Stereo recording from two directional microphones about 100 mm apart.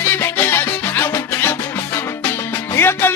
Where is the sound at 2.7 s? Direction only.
25° left (ahead or behind).